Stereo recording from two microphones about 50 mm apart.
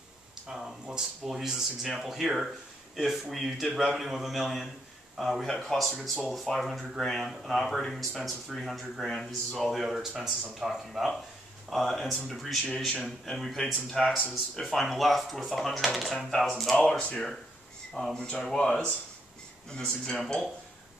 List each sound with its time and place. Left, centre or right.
0.5 s speech: centre
16.7 s speech: centre